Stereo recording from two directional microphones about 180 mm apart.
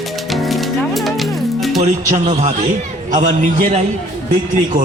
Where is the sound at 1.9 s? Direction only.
40° right (ahead or behind).